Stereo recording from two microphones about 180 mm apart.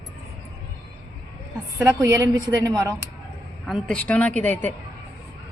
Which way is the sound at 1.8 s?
15° right (ahead or behind).